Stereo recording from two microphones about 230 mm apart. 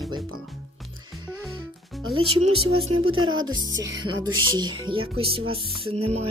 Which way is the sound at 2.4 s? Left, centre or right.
Right.